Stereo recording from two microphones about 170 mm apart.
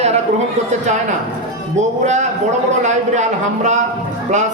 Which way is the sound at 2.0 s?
45° right (ahead or behind).